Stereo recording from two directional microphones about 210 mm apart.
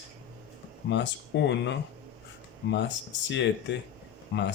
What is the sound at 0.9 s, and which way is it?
Speech, 55° left (ahead or behind).